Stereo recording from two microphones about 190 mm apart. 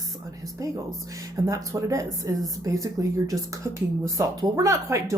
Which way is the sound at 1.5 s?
15° right (ahead or behind).